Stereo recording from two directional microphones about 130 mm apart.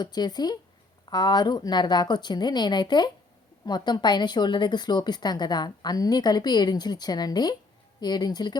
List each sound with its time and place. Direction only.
0.0 s a woman's voice: 30° left (ahead or behind)